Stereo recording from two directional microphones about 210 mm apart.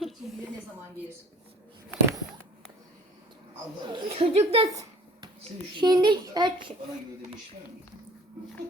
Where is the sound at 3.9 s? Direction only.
30° right (ahead or behind).